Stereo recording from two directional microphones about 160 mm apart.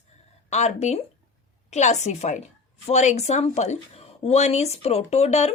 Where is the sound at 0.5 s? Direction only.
45° left (ahead or behind).